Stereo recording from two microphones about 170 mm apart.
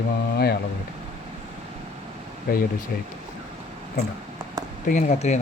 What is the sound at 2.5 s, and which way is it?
Speech, 60° left (ahead or behind).